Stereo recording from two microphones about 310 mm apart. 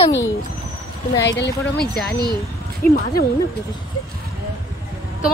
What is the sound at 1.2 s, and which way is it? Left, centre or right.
Speech, left.